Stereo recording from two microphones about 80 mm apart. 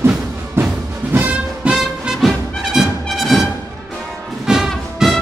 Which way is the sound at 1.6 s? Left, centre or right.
Centre.